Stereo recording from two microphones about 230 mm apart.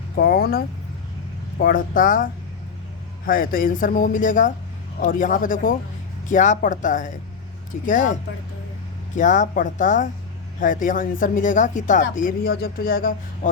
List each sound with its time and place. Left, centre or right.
0.2 s speech: left
9.1 s speech: left